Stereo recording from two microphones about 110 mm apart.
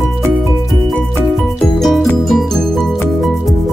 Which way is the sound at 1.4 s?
Centre (ahead or behind).